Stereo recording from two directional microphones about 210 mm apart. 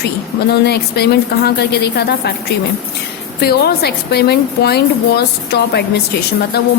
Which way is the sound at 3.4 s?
50° left (ahead or behind).